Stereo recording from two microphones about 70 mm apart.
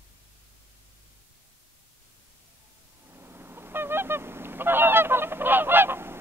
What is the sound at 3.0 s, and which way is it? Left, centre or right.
Goose, right.